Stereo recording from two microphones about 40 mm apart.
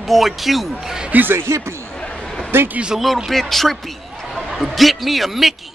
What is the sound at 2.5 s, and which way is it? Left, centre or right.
Speech, right.